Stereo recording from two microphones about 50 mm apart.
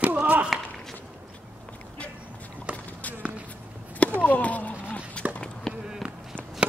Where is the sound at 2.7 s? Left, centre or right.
Right.